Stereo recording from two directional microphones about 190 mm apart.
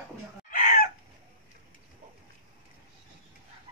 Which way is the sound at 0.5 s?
45° left (ahead or behind).